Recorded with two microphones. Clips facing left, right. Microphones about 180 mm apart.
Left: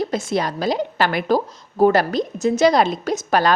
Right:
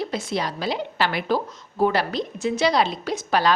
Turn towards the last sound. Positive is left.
turn(degrees=50)  # may be behind; listen again after turning